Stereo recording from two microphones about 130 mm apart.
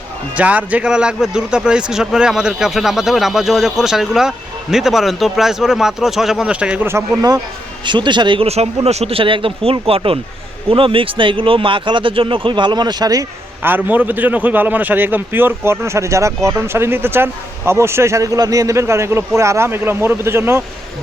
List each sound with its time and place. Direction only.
0.3 s a man's voice: 10° right (ahead or behind)
7.2 s a man's voice: 25° right (ahead or behind)
13.6 s a man's voice: 15° right (ahead or behind)